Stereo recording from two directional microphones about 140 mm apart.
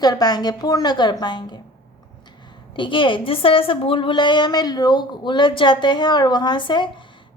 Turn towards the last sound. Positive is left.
turn(degrees=35)  # may be behind; listen again after turning